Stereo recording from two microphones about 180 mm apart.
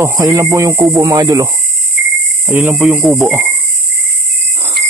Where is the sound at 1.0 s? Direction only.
20° right (ahead or behind).